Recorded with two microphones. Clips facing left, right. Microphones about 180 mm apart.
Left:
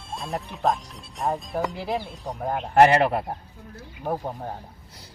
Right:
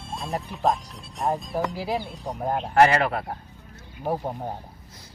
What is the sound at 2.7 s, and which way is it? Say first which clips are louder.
Speech: left 2 dB; 25° left (ahead or behind).